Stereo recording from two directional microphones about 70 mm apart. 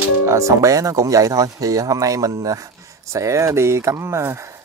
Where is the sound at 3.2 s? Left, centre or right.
Right.